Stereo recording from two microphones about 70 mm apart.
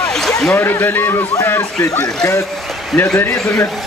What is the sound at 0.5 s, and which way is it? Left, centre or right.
Speech, left.